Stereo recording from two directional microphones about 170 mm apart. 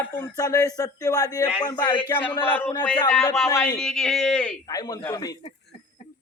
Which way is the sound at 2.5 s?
10° left (ahead or behind).